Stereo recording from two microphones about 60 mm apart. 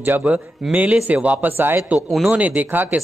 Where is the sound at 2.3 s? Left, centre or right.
Right.